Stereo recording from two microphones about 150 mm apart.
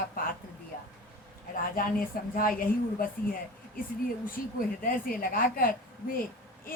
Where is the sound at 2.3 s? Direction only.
70° left (ahead or behind).